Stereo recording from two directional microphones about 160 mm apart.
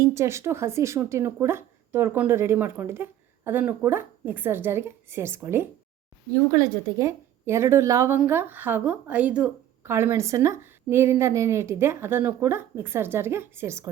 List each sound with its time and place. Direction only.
0.1 s a woman's voice: 20° right (ahead or behind)